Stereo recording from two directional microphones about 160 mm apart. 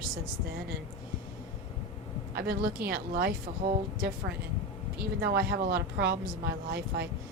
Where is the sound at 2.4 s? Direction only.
75° right (ahead or behind).